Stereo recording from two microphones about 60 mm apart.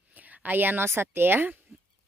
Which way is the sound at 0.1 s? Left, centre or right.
Right.